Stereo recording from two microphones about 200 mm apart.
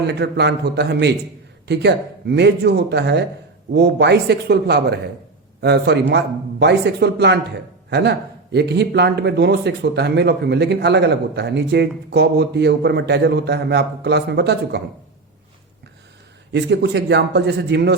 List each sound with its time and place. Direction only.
0.1 s speech: 55° right (ahead or behind)
16.5 s speech: 60° right (ahead or behind)